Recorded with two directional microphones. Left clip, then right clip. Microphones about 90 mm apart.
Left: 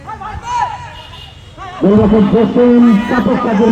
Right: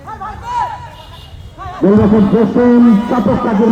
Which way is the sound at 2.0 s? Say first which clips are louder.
Left 1 dB; 40° right (ahead or behind).